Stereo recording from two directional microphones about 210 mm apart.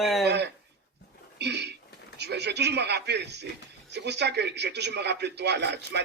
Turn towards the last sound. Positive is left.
turn(degrees=-50)  # may be behind; listen again after turning